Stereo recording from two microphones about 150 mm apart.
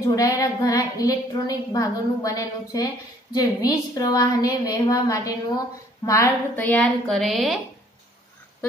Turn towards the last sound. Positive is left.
turn(degrees=0)  # may be behind; listen again after turning